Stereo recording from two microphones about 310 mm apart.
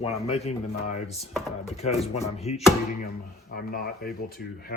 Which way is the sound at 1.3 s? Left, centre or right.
Centre.